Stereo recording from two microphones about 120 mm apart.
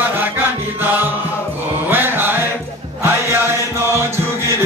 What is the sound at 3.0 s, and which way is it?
Music, 20° right (ahead or behind).